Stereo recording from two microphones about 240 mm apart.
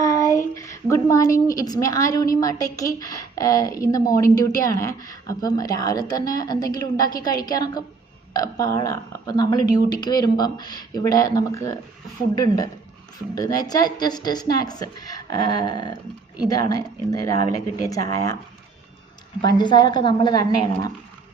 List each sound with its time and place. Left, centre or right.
0.0 s a woman's voice: centre
19.4 s a woman's voice: centre